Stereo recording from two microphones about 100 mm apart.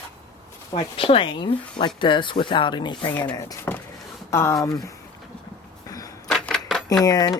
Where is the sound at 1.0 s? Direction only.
65° left (ahead or behind); by 3.1 s 50° left (ahead or behind).